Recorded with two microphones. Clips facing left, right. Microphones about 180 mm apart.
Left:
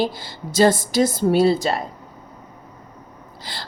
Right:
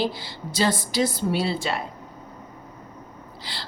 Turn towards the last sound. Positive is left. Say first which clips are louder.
# left 2 dB
turn(degrees=45)  # may be behind; listen again after turning